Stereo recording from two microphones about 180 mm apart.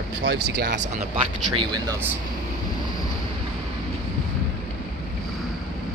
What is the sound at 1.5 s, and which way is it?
Speech, 25° right (ahead or behind).